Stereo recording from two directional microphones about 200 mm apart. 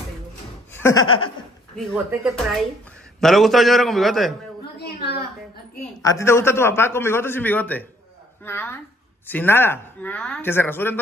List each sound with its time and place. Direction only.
0.7 s laughter: 15° left (ahead or behind)
1.8 s a man's voice: centre (ahead or behind)
4.7 s a sound: 55° left (ahead or behind)
6.0 s a man's voice: 15° left (ahead or behind)